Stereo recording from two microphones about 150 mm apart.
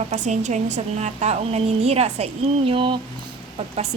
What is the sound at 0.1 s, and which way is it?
A woman's voice, 50° right (ahead or behind).